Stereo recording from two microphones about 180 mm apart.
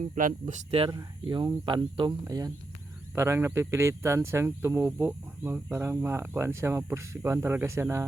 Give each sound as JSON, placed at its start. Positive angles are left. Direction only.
{"t": 0.0, "sound": "speech", "side_deg": -45}